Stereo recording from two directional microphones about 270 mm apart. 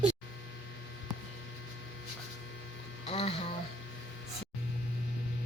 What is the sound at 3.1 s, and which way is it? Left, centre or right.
Mains hum, left.